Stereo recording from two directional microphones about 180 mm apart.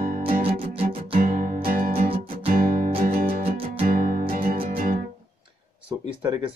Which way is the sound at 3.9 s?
50° right (ahead or behind).